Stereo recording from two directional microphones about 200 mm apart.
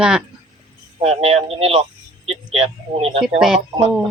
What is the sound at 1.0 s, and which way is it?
Speech, 30° right (ahead or behind).